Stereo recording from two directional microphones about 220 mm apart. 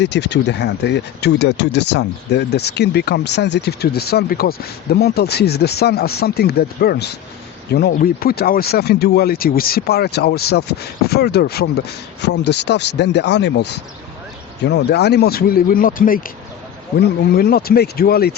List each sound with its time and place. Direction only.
0.0 s speech: 50° left (ahead or behind)